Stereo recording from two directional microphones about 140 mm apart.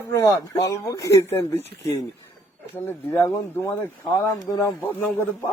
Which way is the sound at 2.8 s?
15° left (ahead or behind).